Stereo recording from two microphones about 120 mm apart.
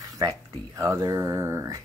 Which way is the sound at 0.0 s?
30° right (ahead or behind).